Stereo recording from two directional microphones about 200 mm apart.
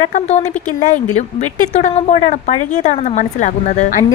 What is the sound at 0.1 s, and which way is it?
Speech, 35° left (ahead or behind).